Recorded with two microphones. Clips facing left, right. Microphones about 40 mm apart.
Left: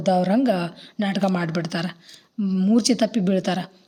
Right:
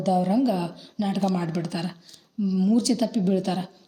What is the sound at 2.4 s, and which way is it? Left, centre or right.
Speech, left.